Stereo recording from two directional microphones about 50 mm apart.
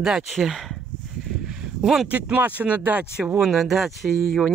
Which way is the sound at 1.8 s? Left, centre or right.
Centre.